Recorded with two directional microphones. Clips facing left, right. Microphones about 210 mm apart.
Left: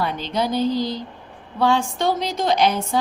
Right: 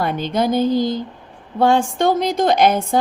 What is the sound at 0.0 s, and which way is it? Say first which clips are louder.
A woman's voice: right 4 dB; 50° right (ahead or behind).